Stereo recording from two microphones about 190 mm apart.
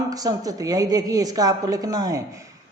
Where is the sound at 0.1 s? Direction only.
20° right (ahead or behind).